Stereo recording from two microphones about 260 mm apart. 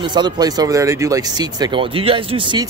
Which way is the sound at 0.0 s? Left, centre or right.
Centre.